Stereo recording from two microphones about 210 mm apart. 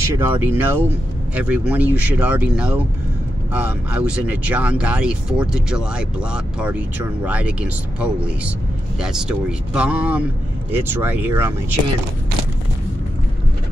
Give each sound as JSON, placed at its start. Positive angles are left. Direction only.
{"t": 0.0, "sound": "speech", "side_deg": -10}